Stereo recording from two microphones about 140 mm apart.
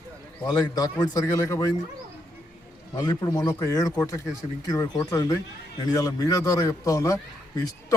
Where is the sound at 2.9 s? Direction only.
25° left (ahead or behind).